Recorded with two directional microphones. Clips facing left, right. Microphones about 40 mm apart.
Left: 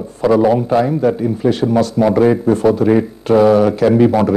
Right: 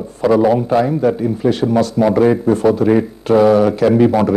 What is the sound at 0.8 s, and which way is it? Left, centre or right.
A man's voice, centre.